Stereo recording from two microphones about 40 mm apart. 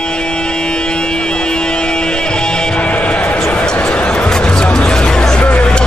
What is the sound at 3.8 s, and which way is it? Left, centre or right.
Music, left.